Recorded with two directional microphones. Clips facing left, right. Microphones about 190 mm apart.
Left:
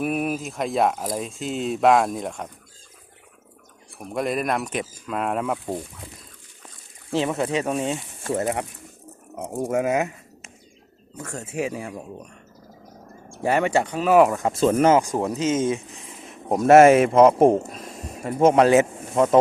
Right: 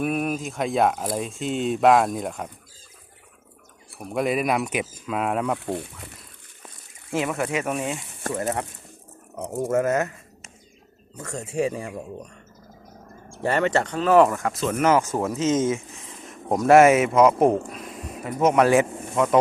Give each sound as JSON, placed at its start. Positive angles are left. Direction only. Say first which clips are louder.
{"t": 0.0, "sound": "speech", "louder": "even", "side_deg": 0}
{"t": 3.9, "sound": "speech", "louder": "right 1 dB", "side_deg": 0}
{"t": 7.2, "sound": "speech", "louder": "left 2 dB", "side_deg": 25}
{"t": 9.6, "sound": "speech", "louder": "even", "side_deg": 15}
{"t": 11.2, "sound": "speech", "louder": "right 2 dB", "side_deg": 10}
{"t": 13.4, "sound": "speech", "louder": "left 1 dB", "side_deg": 10}
{"t": 14.9, "sound": "speech", "louder": "left 2 dB", "side_deg": 15}
{"t": 15.4, "sound": "speech", "louder": "right 1 dB", "side_deg": -25}
{"t": 16.6, "sound": "speech", "louder": "left 2 dB", "side_deg": 25}
{"t": 17.6, "sound": "speech", "louder": "even", "side_deg": 40}
{"t": 18.2, "sound": "speech", "louder": "left 3 dB", "side_deg": 30}